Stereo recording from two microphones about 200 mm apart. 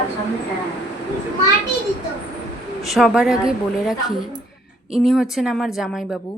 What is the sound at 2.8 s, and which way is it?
A woman's voice, centre (ahead or behind).